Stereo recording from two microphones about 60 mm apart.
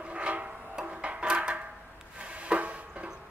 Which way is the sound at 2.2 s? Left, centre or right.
Centre.